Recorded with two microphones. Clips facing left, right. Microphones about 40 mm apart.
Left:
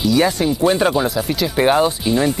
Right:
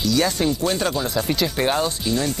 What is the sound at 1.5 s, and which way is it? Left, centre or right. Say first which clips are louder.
Speech: left 7 dB; centre.